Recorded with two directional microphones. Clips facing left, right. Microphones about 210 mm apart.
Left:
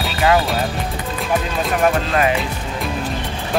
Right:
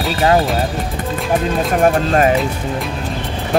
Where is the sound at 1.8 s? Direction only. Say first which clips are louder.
Right 4 dB; 40° right (ahead or behind).